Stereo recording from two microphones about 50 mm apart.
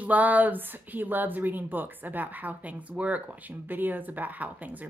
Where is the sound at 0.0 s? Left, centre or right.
Right.